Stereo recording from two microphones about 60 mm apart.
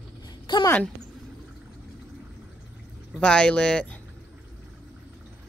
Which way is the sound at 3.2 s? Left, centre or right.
Centre.